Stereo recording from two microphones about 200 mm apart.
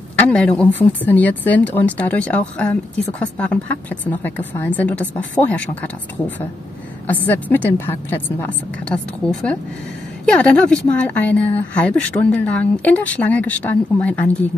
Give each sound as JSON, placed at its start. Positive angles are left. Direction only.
{"t": 0.1, "sound": "a woman's voice", "side_deg": 5}